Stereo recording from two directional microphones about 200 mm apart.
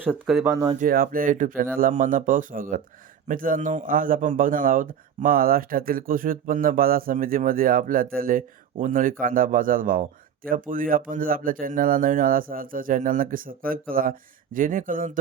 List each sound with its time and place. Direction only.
0.0 s speech: 5° right (ahead or behind)
0.5 s speech: 20° right (ahead or behind)
0.8 s a man's voice: 45° right (ahead or behind)